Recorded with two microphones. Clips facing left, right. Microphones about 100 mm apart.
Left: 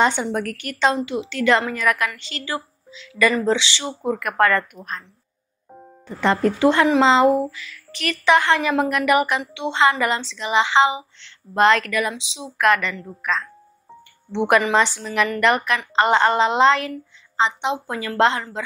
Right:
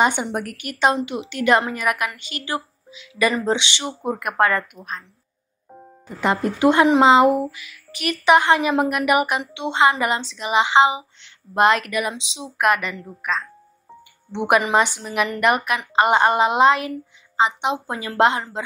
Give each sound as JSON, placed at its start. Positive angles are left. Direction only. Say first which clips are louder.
{"t": 0.0, "sound": "speech", "louder": "left 1 dB", "side_deg": -15}
{"t": 6.0, "sound": "speech", "louder": "left 2 dB", "side_deg": -10}